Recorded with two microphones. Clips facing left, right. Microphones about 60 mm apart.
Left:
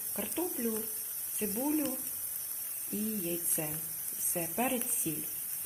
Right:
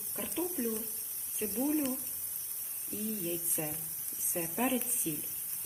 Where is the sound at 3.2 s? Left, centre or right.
Centre.